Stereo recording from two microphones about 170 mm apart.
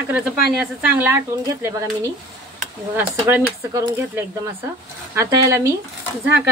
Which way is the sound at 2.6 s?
10° right (ahead or behind).